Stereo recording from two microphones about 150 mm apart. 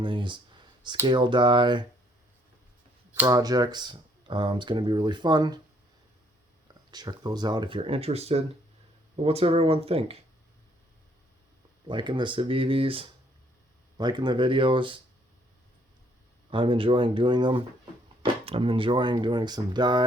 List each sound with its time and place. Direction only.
0.0 s clicking: 35° right (ahead or behind)
1.0 s speech: 30° right (ahead or behind)
3.2 s speech: 25° right (ahead or behind)
6.9 s speech: 25° right (ahead or behind)
11.9 s speech: 30° right (ahead or behind)
16.5 s speech: 35° right (ahead or behind)